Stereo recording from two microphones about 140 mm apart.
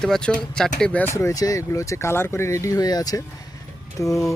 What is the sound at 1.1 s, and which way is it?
Speech, 25° left (ahead or behind).